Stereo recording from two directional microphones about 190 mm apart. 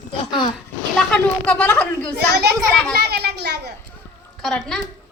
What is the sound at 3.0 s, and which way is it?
Speech, 60° right (ahead or behind).